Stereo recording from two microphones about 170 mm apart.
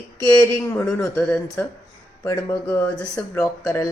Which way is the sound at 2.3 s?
15° left (ahead or behind).